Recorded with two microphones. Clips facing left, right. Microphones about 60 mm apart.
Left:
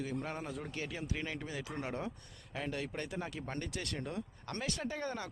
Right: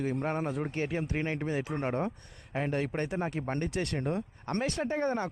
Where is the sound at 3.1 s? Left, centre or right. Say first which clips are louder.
Right 8 dB; right.